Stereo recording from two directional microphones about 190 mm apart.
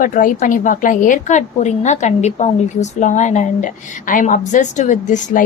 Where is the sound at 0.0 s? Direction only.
45° left (ahead or behind).